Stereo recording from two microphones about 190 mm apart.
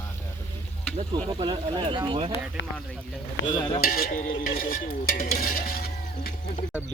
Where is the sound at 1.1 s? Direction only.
25° right (ahead or behind).